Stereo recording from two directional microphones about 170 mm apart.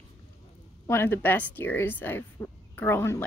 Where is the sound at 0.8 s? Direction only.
15° left (ahead or behind).